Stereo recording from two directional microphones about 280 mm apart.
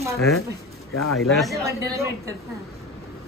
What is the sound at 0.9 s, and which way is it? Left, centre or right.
Speech, left.